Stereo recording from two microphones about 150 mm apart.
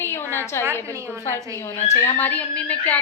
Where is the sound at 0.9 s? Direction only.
15° right (ahead or behind).